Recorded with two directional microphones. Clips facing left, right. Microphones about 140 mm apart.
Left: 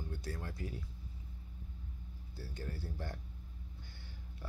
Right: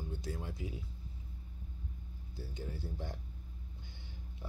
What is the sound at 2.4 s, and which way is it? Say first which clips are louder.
Speech: right 1 dB; 20° right (ahead or behind).